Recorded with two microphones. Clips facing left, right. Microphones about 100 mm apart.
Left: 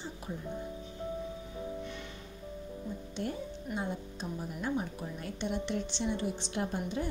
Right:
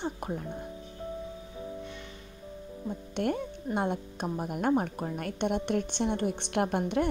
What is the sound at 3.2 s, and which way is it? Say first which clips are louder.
A woman's voice: right 8 dB; 65° right (ahead or behind).